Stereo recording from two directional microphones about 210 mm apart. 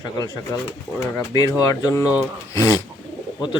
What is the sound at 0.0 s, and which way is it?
Speech, 20° left (ahead or behind).